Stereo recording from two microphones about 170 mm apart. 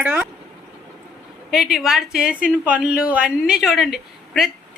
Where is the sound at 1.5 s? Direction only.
Centre (ahead or behind).